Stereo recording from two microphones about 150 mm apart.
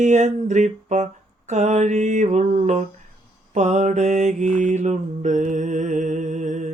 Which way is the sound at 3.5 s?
50° right (ahead or behind).